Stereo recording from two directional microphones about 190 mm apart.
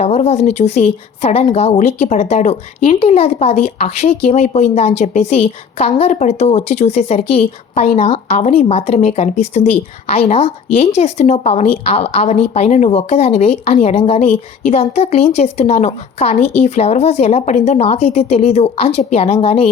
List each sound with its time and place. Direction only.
0.0 s speech: 35° left (ahead or behind)